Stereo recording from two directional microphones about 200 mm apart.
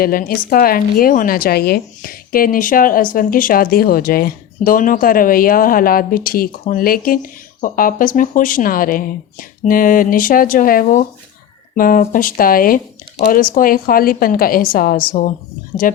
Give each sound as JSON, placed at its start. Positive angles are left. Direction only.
{"t": 0.0, "sound": "a woman's voice", "side_deg": 45}